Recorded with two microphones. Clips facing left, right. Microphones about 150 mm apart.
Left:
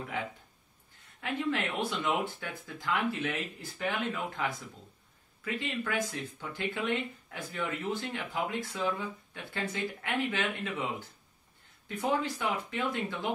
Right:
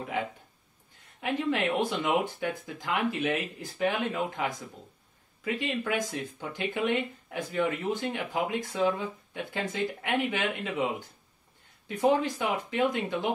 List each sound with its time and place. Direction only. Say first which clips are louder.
1.2 s speech: right 4 dB; 15° right (ahead or behind)